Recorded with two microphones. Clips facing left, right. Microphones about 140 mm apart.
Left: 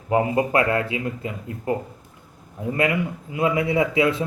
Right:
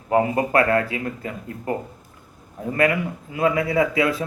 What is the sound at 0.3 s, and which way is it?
Speech, 20° left (ahead or behind).